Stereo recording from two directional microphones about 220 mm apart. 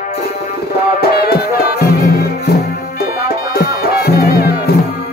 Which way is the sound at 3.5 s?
45° left (ahead or behind).